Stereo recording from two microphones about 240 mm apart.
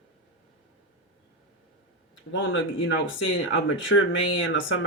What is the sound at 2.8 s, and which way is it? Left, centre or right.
Speech, left.